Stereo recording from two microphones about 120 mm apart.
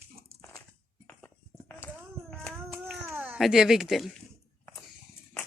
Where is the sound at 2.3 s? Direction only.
5° left (ahead or behind).